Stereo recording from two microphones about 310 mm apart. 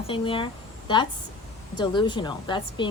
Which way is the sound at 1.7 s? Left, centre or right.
Centre.